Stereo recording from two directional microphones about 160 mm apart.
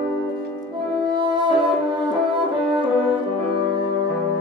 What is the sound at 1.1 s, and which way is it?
Music, 30° right (ahead or behind).